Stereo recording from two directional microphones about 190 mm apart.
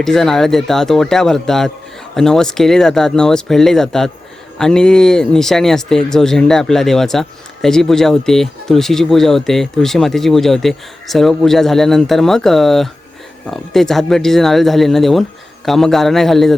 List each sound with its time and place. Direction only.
0.0 s speech: centre (ahead or behind)